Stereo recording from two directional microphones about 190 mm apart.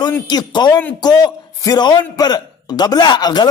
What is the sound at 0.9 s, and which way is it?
A man's voice, 20° left (ahead or behind).